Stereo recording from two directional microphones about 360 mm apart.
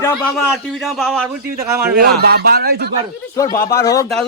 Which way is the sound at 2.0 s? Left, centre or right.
Right.